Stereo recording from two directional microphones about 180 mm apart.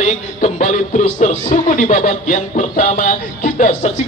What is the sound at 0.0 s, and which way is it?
Speech, 40° left (ahead or behind).